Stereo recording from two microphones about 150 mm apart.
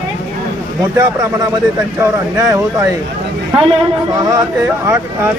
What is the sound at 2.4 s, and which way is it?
Speech, 20° right (ahead or behind).